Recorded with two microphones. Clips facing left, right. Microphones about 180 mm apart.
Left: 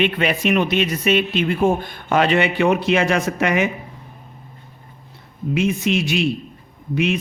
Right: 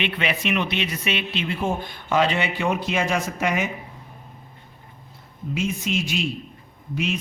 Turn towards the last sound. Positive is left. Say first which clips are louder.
# left 6 dB
turn(degrees=65)  # may be behind; listen again after turning